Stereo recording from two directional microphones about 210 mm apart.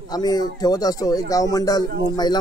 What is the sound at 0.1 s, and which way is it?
Speech, 20° left (ahead or behind).